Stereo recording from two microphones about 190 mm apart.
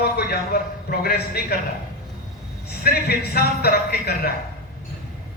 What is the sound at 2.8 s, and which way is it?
A man's voice, 55° left (ahead or behind).